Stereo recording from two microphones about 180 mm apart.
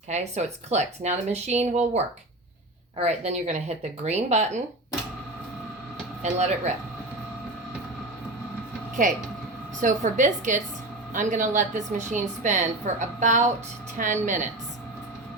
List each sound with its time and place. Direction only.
0.1 s speech: 40° right (ahead or behind)
3.0 s speech: 35° right (ahead or behind)
9.0 s a woman's voice: 45° right (ahead or behind)